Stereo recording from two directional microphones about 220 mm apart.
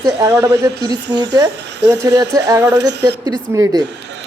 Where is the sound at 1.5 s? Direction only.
50° right (ahead or behind).